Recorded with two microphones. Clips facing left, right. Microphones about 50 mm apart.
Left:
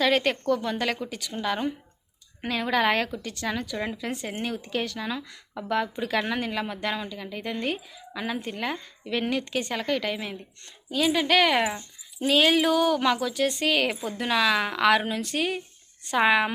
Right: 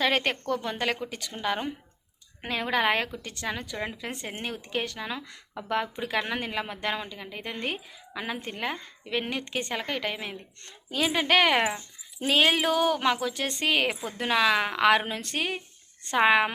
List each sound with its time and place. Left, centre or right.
0.0 s speech: right
3.2 s a woman's voice: right
3.4 s speech: centre
3.9 s a woman's voice: right
10.7 s a woman's voice: right